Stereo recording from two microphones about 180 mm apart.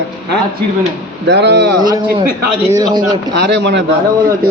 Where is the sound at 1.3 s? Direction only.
70° right (ahead or behind).